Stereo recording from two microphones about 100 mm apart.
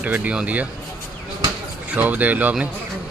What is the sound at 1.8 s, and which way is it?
Speech, 15° right (ahead or behind).